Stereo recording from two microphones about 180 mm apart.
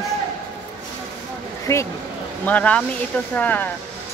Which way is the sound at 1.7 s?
15° left (ahead or behind).